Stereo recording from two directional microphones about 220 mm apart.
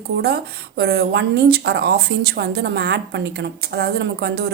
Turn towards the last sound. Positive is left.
turn(degrees=-50)  # may be behind; listen again after turning